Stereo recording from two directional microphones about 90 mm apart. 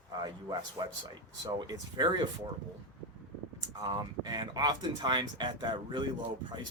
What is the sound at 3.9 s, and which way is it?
Speech, 55° right (ahead or behind).